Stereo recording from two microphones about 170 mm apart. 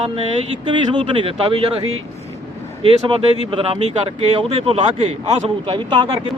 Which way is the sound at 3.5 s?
35° right (ahead or behind).